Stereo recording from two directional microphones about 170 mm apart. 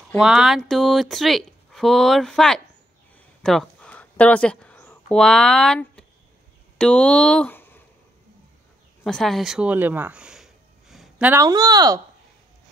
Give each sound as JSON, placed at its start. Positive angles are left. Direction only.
{"t": 0.2, "sound": "speech", "side_deg": -5}
{"t": 3.4, "sound": "a sound", "side_deg": 5}
{"t": 6.8, "sound": "speech", "side_deg": 5}
{"t": 9.0, "sound": "speech", "side_deg": 0}
{"t": 11.4, "sound": "speech", "side_deg": -20}